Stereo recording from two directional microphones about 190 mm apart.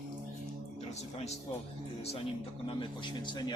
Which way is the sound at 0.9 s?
35° left (ahead or behind).